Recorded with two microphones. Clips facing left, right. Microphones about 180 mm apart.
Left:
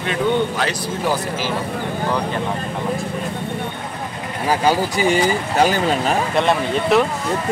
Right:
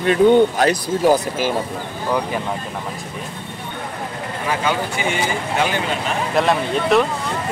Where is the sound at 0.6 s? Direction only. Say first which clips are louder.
Right 5 dB; 45° right (ahead or behind).